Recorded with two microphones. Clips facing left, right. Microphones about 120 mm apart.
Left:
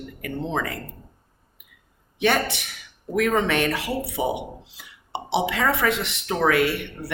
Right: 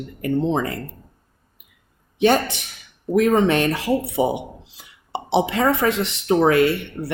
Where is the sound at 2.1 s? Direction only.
35° right (ahead or behind).